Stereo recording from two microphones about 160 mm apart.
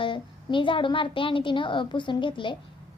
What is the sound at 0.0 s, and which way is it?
A woman's voice, 30° left (ahead or behind).